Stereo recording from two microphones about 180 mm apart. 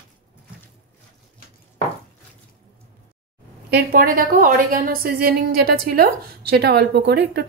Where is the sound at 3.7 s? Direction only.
55° right (ahead or behind).